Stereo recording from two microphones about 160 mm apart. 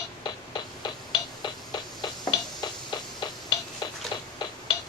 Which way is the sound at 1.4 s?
25° left (ahead or behind).